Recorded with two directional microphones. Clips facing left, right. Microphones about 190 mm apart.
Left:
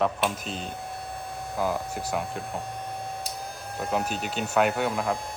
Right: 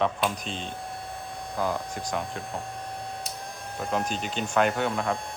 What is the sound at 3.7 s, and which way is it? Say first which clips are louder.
Speech: left 1 dB; 5° left (ahead or behind).